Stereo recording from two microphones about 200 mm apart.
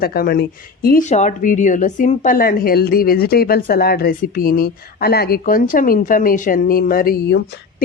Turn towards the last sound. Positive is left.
turn(degrees=45)  # may be behind; listen again after turning